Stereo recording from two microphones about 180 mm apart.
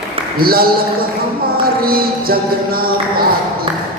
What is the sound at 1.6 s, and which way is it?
Music, 55° right (ahead or behind).